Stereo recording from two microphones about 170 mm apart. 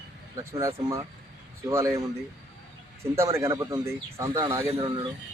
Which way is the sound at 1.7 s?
15° right (ahead or behind).